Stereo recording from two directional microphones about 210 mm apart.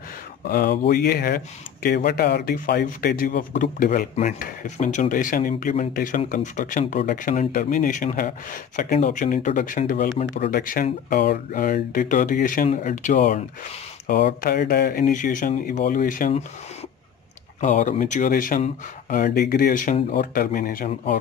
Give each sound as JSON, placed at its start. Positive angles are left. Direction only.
{"t": 0.5, "sound": "speech", "side_deg": 45}
{"t": 17.6, "sound": "speech", "side_deg": 35}